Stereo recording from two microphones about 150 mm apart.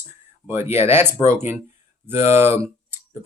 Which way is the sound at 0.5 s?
45° left (ahead or behind).